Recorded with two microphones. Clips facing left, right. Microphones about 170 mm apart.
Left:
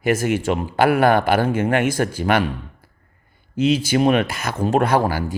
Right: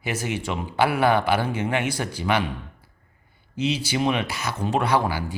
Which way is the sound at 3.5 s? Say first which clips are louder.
Left 7 dB; 50° left (ahead or behind).